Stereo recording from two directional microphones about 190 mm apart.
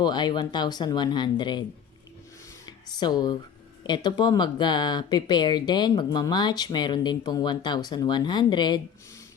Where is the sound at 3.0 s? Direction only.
20° left (ahead or behind).